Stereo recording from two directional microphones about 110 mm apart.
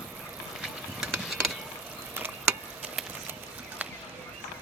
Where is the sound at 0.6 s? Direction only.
5° right (ahead or behind).